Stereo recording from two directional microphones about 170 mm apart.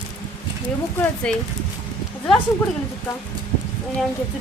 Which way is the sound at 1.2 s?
5° left (ahead or behind).